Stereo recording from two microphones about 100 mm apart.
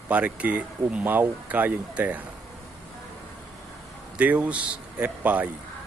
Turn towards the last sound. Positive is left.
turn(degrees=-15)  # may be behind; listen again after turning